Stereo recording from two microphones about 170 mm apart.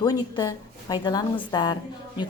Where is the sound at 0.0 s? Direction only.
20° left (ahead or behind).